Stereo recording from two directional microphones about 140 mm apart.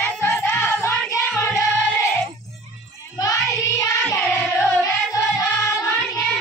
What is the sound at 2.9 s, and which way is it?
Child singing, 25° left (ahead or behind).